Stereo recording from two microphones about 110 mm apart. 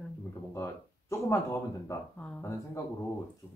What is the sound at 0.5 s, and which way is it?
Speech, 25° left (ahead or behind).